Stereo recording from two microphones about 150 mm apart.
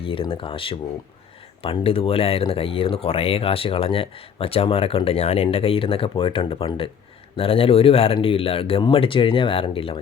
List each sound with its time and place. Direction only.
0.0 s speech: 35° left (ahead or behind)